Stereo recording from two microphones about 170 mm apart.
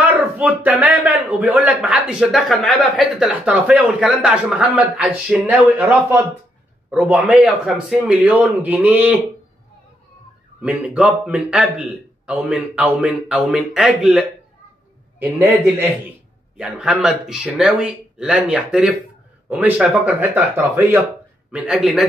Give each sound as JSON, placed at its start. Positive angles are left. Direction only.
{"t": 0.0, "sound": "a man's voice", "side_deg": -10}
{"t": 10.6, "sound": "a man's voice", "side_deg": -10}